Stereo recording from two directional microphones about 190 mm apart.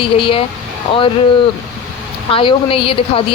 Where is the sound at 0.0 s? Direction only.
30° left (ahead or behind).